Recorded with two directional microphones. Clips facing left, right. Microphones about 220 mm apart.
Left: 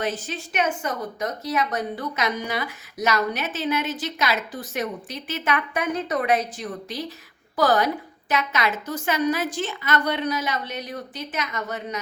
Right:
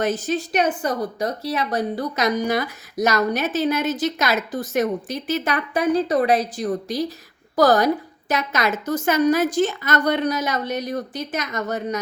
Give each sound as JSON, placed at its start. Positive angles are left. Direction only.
{"t": 0.0, "sound": "a woman's voice", "side_deg": -40}